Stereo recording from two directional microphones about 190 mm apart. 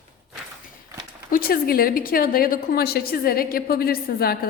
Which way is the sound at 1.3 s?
50° left (ahead or behind).